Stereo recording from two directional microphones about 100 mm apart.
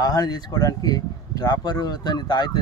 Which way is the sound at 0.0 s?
40° left (ahead or behind).